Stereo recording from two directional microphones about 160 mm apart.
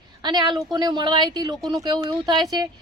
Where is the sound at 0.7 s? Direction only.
25° right (ahead or behind).